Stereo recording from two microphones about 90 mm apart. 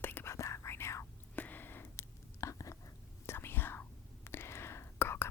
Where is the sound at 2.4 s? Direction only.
35° left (ahead or behind).